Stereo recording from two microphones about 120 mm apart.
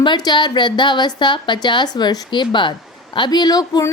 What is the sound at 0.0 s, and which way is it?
A woman's voice, 40° left (ahead or behind).